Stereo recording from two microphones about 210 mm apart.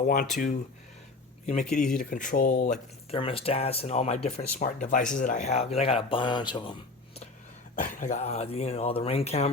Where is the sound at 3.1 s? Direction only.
25° left (ahead or behind).